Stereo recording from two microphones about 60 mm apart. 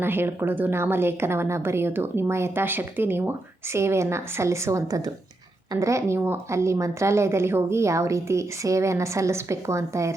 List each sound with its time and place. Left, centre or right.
0.0 s a woman's voice: right
4.9 s speech: right
5.7 s speech: right